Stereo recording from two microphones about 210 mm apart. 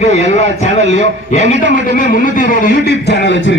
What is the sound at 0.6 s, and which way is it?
A man's voice, 35° left (ahead or behind).